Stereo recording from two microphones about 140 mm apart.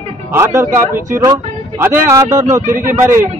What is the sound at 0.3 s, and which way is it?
Speech, 15° right (ahead or behind).